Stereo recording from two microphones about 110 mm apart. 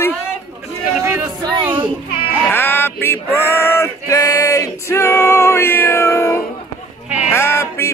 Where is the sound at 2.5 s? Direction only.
20° left (ahead or behind).